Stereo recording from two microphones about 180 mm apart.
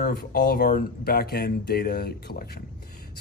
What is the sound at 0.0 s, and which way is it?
Speech, 60° left (ahead or behind).